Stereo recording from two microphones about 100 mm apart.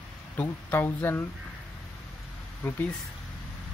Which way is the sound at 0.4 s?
20° left (ahead or behind).